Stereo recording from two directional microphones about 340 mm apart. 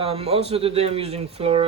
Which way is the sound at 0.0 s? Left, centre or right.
Centre.